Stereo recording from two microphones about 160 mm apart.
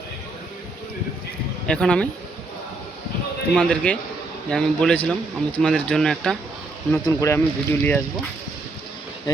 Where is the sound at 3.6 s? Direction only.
10° left (ahead or behind).